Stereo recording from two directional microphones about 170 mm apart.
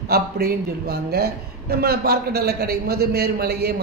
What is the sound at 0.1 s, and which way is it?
A man's voice, 65° right (ahead or behind).